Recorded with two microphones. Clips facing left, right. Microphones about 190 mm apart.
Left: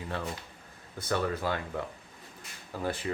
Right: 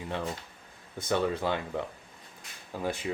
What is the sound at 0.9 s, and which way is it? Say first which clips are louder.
Speech: right 2 dB; 20° right (ahead or behind).